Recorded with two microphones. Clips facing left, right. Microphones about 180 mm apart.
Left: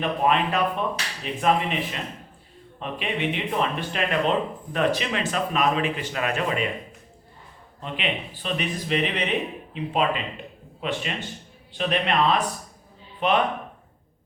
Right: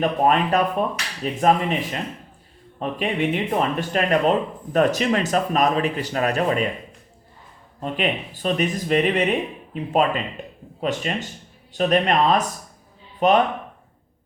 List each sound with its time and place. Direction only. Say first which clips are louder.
0.0 s speech: right 3 dB; 45° right (ahead or behind)
2.7 s speech: right 5 dB; 45° right (ahead or behind)
7.8 s speech: right 5 dB; 45° right (ahead or behind)